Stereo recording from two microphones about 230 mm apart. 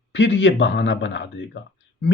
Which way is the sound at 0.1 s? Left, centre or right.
Left.